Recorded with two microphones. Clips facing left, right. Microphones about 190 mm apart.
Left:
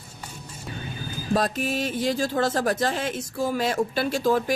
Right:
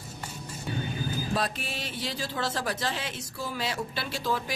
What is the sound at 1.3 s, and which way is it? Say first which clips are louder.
Speech: left 12 dB; 45° left (ahead or behind).